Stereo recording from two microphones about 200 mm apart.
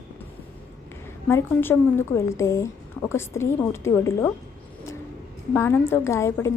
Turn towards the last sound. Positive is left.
turn(degrees=15)  # may be behind; listen again after turning